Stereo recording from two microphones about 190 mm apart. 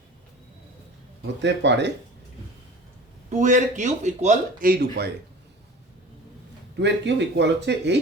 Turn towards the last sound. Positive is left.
turn(degrees=-65)  # may be behind; listen again after turning